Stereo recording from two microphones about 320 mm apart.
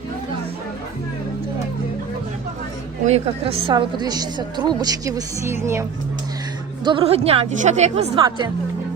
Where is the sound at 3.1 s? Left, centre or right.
Centre.